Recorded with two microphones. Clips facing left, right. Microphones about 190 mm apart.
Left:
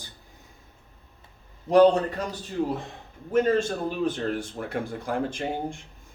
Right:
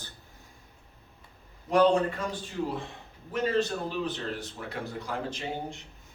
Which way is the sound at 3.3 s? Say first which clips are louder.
Left 5 dB; 50° left (ahead or behind).